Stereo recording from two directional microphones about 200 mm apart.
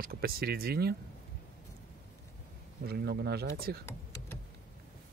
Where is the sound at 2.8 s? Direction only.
50° right (ahead or behind).